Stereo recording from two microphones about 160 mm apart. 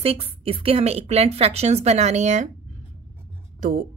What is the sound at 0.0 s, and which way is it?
Speech, 35° right (ahead or behind).